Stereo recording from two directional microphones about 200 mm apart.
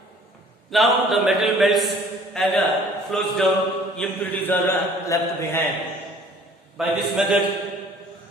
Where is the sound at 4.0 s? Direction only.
10° left (ahead or behind).